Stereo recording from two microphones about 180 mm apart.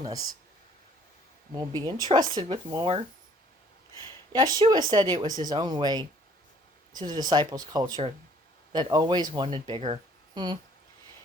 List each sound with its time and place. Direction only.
1.5 s speech: 20° right (ahead or behind)
4.3 s speech: 20° right (ahead or behind)